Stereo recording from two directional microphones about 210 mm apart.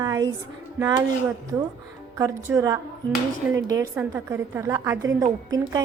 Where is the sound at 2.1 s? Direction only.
15° right (ahead or behind).